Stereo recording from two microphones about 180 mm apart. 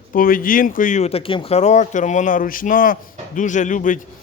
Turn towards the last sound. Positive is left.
turn(degrees=45)  # may be behind; listen again after turning